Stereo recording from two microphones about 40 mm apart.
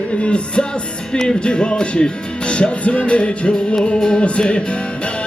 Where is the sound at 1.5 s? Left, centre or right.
Left.